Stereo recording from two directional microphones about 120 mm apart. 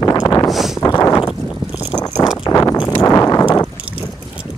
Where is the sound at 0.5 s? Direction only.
Centre (ahead or behind).